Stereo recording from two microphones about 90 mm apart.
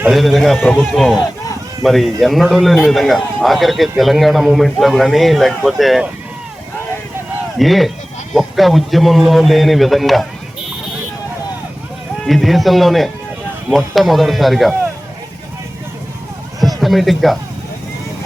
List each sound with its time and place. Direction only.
0.1 s a man's voice: centre (ahead or behind)
7.6 s a man's voice: centre (ahead or behind)
12.2 s a man's voice: centre (ahead or behind)
16.6 s a sound: centre (ahead or behind)